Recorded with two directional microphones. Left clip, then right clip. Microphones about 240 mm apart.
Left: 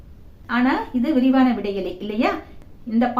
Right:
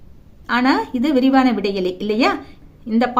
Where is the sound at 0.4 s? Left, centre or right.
Right.